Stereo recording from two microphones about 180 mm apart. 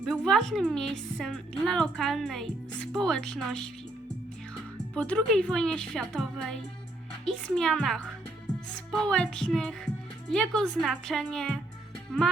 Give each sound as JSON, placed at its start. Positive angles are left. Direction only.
{"t": 0.0, "sound": "a woman's voice", "side_deg": 0}